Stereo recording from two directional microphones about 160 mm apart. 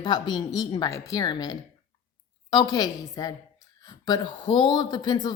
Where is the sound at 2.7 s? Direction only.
25° left (ahead or behind).